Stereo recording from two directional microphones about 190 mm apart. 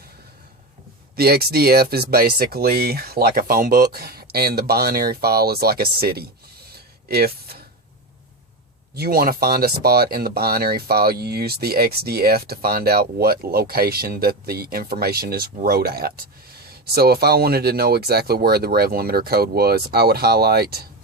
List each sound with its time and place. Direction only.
1.1 s speech: 55° right (ahead or behind)
9.0 s speech: 50° right (ahead or behind)